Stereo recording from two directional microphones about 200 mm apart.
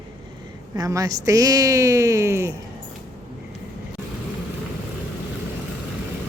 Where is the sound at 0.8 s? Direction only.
15° right (ahead or behind).